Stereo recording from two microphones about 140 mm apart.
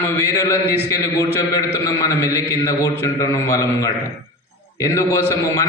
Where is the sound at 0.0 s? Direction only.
25° left (ahead or behind).